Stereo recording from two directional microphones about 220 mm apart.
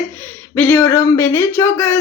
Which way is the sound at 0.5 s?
10° left (ahead or behind).